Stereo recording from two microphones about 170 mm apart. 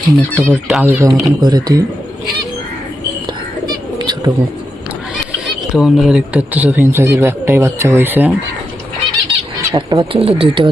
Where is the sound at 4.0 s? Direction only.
25° right (ahead or behind).